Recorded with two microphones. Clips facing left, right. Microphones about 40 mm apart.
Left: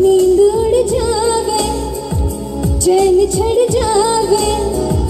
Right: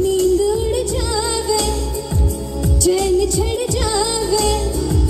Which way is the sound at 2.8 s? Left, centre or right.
Left.